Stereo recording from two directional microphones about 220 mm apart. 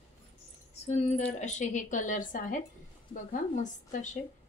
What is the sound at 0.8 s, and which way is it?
A woman's voice, 30° left (ahead or behind).